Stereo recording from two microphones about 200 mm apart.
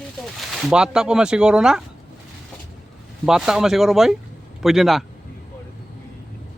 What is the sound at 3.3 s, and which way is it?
Speech, 5° right (ahead or behind).